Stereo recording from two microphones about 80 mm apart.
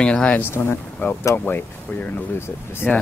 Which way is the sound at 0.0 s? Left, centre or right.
Centre.